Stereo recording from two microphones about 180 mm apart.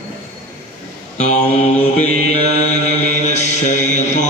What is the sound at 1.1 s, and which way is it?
Mantra, 40° left (ahead or behind).